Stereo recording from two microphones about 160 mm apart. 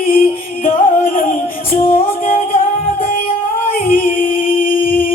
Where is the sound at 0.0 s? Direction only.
65° left (ahead or behind).